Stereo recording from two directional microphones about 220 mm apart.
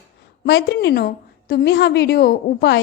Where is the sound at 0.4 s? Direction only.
50° left (ahead or behind).